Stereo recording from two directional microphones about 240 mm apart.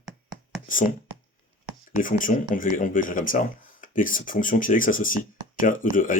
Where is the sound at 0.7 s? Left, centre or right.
Left.